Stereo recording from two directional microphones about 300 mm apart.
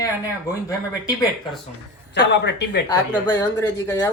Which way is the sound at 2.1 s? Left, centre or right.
Left.